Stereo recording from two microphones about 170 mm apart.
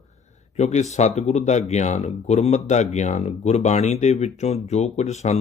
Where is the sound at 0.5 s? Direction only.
40° left (ahead or behind).